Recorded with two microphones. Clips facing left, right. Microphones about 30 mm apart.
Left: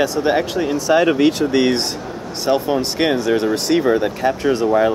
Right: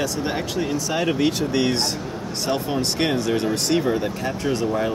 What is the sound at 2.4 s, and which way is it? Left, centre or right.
Speech, centre.